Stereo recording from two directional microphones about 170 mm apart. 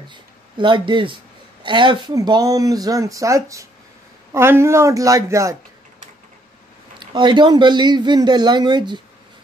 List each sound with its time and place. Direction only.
0.1 s a man's voice: 30° right (ahead or behind)
7.0 s a man's voice: 25° right (ahead or behind)